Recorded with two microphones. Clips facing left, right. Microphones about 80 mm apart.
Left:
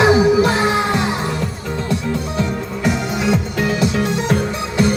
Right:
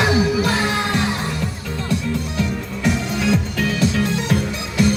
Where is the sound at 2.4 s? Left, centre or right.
Left.